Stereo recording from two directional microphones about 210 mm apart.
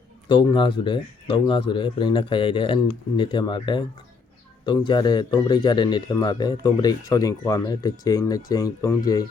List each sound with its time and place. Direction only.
0.3 s speech: 25° left (ahead or behind)